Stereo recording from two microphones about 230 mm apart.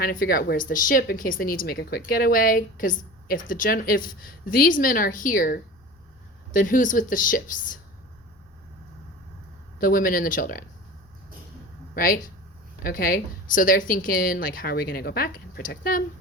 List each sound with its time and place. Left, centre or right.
0.0 s speech: left
9.7 s speech: left
11.9 s speech: left